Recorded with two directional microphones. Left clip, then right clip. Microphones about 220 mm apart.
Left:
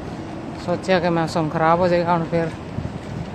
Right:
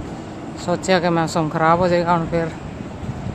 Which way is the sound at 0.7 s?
10° right (ahead or behind).